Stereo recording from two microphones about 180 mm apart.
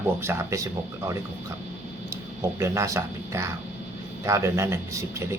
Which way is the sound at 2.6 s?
15° right (ahead or behind).